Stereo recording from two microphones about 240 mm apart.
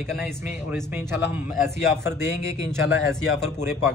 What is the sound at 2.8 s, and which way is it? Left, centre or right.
Speech, left.